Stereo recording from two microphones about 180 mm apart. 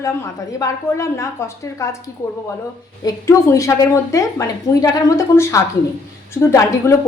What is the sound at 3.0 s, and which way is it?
A woman's voice, 15° left (ahead or behind).